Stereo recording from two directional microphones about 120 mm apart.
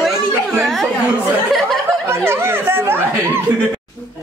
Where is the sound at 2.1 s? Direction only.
20° right (ahead or behind).